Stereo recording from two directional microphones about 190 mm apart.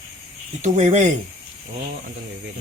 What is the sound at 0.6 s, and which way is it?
Speech, 40° right (ahead or behind).